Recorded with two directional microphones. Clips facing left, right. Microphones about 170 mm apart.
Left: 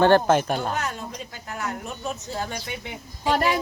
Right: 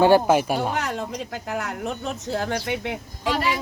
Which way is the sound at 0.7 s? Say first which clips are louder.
Right 3 dB; 90° right.